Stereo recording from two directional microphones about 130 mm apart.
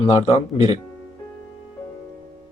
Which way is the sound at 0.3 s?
55° left (ahead or behind).